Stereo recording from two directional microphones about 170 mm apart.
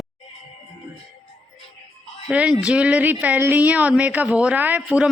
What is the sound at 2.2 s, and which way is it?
Speech, 5° right (ahead or behind).